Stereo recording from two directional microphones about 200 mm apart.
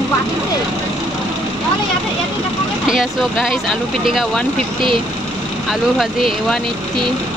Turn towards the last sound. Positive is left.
turn(degrees=0)  # may be behind; listen again after turning